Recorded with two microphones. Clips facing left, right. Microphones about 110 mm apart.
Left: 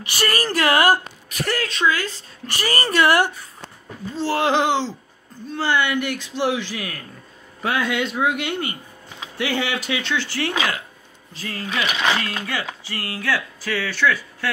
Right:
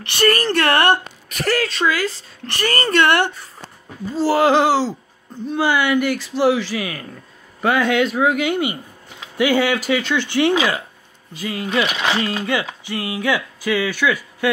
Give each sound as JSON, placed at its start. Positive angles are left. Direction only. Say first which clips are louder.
{"t": 0.0, "sound": "a man's voice", "louder": "right 6 dB", "side_deg": 5}
{"t": 4.2, "sound": "a man's voice", "louder": "right 5 dB", "side_deg": -5}
{"t": 10.1, "sound": "speech", "louder": "right 8 dB", "side_deg": -20}
{"t": 11.3, "sound": "a man's voice", "louder": "right 6 dB", "side_deg": -5}
{"t": 12.2, "sound": "speech", "louder": "right 6 dB", "side_deg": -20}